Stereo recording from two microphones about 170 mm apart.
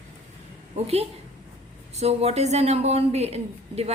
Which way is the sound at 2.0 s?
40° right (ahead or behind).